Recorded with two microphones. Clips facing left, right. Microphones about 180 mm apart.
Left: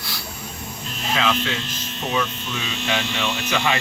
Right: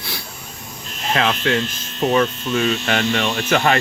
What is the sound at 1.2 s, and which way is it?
Speech, 60° right (ahead or behind).